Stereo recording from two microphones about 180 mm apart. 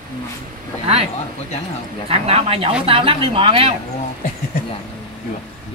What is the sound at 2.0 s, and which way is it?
Speech, 35° right (ahead or behind).